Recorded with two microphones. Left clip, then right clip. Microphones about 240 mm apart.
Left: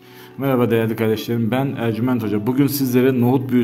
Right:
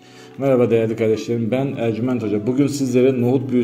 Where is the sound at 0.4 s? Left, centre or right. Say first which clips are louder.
Right 2 dB; centre.